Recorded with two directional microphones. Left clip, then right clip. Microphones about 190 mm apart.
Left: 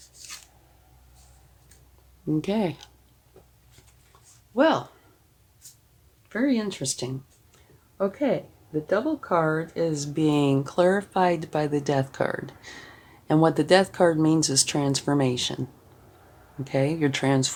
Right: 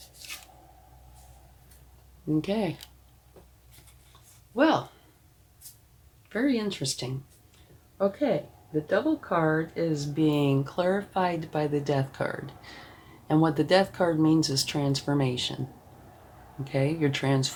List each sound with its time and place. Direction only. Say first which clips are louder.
0.2 s a sound: right 1 dB; 15° left (ahead or behind)
2.4 s speech: left 3 dB; 45° left (ahead or behind)
4.5 s speech: left 2 dB; 50° left (ahead or behind)
6.2 s speech: left 2 dB; 50° left (ahead or behind)
16.6 s speech: left 3 dB; 45° left (ahead or behind)